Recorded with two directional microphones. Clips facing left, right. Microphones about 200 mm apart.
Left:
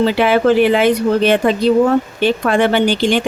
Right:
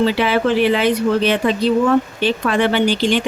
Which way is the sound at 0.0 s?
50° left (ahead or behind).